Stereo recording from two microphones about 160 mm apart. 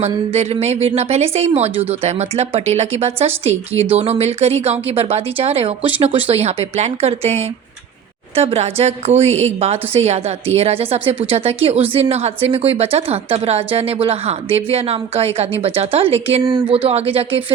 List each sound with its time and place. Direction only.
0.0 s speech: 40° right (ahead or behind)
16.4 s speech: 25° right (ahead or behind)
16.6 s speech: 35° right (ahead or behind)